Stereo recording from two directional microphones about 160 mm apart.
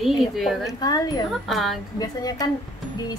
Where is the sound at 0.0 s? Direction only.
Centre (ahead or behind).